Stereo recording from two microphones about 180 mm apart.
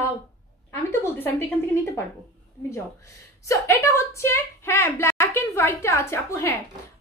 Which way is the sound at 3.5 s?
15° left (ahead or behind).